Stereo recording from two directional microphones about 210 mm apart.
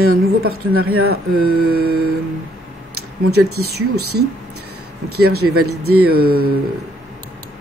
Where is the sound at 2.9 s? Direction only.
90° right.